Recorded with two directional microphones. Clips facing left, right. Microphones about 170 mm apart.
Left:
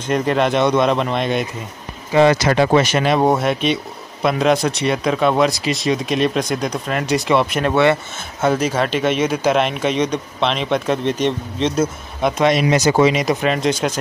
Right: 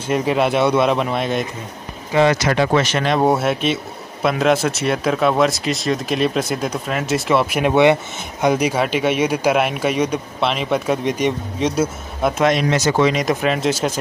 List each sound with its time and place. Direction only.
0.0 s speech: 5° right (ahead or behind)
2.1 s speech: 30° left (ahead or behind)
2.7 s speech: 10° left (ahead or behind)
3.3 s speech: 5° right (ahead or behind)
12.6 s speech: 15° left (ahead or behind); by 13.9 s 5° right (ahead or behind)